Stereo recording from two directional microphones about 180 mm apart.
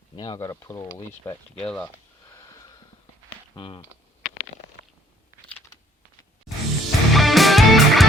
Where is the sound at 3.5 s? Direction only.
30° left (ahead or behind).